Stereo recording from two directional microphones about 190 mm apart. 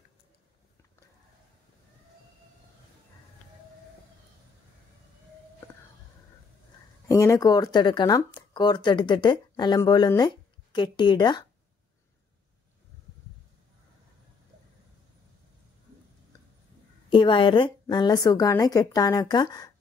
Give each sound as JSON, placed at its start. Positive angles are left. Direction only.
{"t": 7.1, "sound": "speech", "side_deg": 15}
{"t": 17.1, "sound": "speech", "side_deg": 25}